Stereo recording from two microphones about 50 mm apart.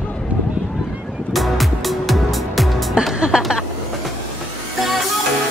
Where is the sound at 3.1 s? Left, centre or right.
Centre.